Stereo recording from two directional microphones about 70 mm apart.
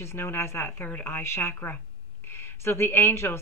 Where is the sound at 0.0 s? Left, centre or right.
Left.